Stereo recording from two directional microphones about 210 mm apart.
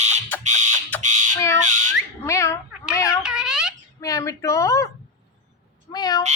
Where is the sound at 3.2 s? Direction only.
5° right (ahead or behind).